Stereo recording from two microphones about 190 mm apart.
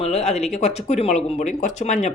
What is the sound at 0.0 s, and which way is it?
Speech, 35° left (ahead or behind).